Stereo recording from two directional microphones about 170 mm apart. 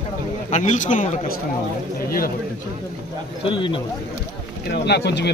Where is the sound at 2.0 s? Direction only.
60° left (ahead or behind).